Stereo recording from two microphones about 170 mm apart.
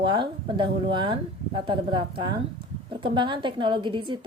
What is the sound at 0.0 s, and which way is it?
A woman's voice, 25° right (ahead or behind).